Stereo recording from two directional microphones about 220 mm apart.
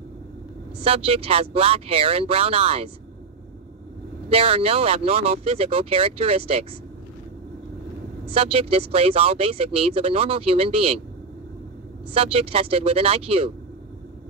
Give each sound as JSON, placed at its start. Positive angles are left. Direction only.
{"t": 0.7, "sound": "speech", "side_deg": -25}
{"t": 4.3, "sound": "speech", "side_deg": -25}
{"t": 8.3, "sound": "speech", "side_deg": -25}
{"t": 12.1, "sound": "speech", "side_deg": -25}